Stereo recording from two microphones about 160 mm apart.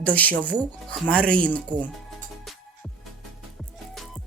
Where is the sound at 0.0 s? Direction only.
10° left (ahead or behind).